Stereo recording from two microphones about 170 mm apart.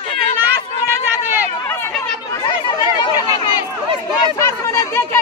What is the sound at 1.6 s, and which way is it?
Chatter, 15° left (ahead or behind).